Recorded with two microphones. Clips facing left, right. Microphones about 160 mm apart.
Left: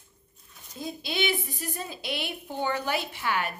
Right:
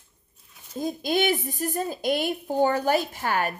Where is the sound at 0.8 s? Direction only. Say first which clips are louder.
Right 6 dB; 45° right (ahead or behind).